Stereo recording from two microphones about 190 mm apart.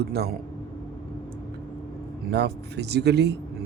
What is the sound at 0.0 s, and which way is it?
Speech, 55° right (ahead or behind).